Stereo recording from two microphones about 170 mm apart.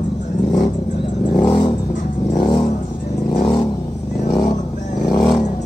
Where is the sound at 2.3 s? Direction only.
25° left (ahead or behind).